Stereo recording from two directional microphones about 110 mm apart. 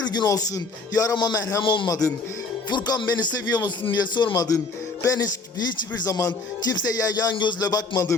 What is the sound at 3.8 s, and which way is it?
Speech, 40° left (ahead or behind).